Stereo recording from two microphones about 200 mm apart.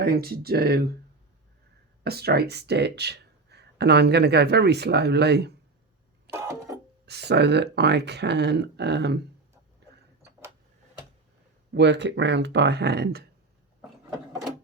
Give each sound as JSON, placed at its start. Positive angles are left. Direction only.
{"t": 0.0, "sound": "speech", "side_deg": -50}
{"t": 2.0, "sound": "speech", "side_deg": -50}
{"t": 6.3, "sound": "a sound", "side_deg": -15}
{"t": 7.0, "sound": "speech", "side_deg": -55}
{"t": 11.7, "sound": "speech", "side_deg": -60}